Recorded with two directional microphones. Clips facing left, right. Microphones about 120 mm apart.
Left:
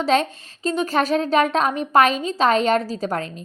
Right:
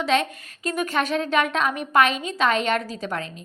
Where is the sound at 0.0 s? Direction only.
35° left (ahead or behind).